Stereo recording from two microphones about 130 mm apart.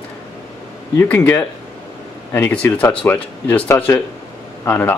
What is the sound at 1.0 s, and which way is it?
Speech, 15° left (ahead or behind).